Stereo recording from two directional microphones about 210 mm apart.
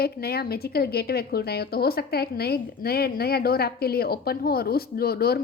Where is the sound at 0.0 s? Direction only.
50° left (ahead or behind).